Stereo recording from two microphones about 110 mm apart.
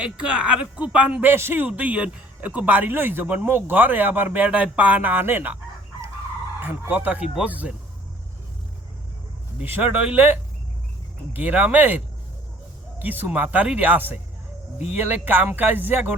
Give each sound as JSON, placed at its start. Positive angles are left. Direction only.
{"t": 0.0, "sound": "speech", "side_deg": -10}
{"t": 6.6, "sound": "speech", "side_deg": -15}
{"t": 9.6, "sound": "speech", "side_deg": -15}